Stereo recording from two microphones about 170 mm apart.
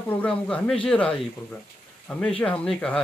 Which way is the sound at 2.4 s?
5° left (ahead or behind).